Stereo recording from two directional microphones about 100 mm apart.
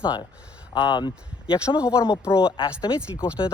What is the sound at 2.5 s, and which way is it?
Speech, 55° left (ahead or behind).